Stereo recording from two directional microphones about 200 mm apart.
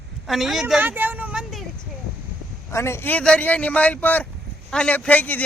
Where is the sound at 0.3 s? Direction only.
Centre (ahead or behind).